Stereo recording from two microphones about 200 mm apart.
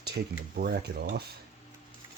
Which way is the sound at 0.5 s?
50° right (ahead or behind).